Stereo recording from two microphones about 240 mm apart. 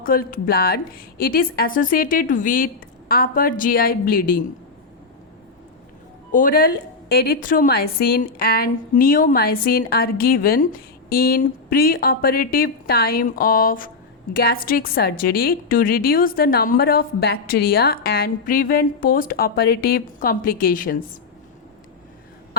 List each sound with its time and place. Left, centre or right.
0.0 s a woman's voice: left
6.3 s a woman's voice: left